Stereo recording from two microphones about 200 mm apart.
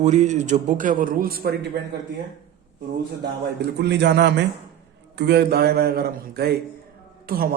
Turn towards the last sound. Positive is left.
turn(degrees=-45)  # may be behind; listen again after turning